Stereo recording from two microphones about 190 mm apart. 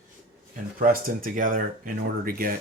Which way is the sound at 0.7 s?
45° right (ahead or behind).